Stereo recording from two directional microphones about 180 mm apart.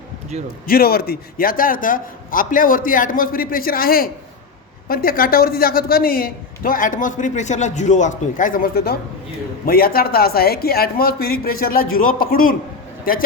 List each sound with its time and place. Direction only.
0.7 s a woman's voice: 55° left (ahead or behind)